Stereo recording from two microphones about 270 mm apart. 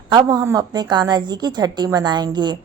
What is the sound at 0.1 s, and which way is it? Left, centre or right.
A woman's voice, centre.